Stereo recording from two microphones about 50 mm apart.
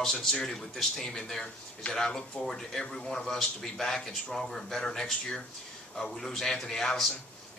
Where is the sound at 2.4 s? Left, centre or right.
Centre.